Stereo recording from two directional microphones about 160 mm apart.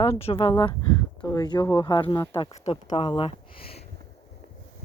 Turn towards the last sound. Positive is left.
turn(degrees=35)  # may be behind; listen again after turning